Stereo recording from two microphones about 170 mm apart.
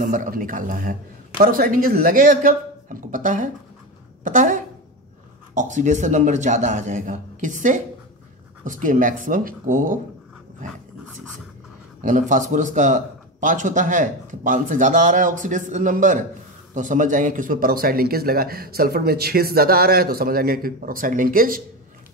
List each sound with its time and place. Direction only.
0.0 s a man's voice: 50° right (ahead or behind)
12.0 s a man's voice: 50° right (ahead or behind)